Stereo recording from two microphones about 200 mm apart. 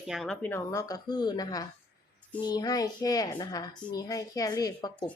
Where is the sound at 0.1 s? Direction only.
5° left (ahead or behind); by 5.0 s 20° left (ahead or behind).